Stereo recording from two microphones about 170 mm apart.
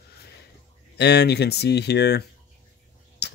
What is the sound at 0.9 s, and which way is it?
Speech, 80° left.